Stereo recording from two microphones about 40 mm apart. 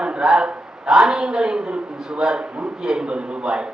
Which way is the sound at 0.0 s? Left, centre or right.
Right.